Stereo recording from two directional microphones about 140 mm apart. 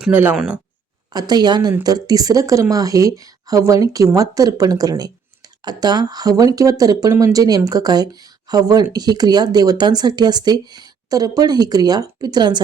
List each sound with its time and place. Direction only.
0.0 s speech: 15° right (ahead or behind)
1.1 s speech: 30° right (ahead or behind)